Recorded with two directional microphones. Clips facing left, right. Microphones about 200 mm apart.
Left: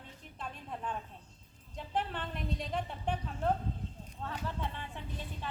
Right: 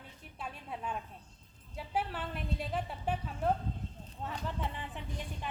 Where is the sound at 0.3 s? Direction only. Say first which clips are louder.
Even; 10° right (ahead or behind).